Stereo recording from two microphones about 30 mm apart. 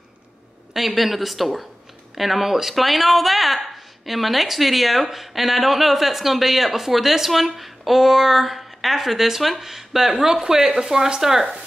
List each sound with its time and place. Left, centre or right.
0.7 s speech: centre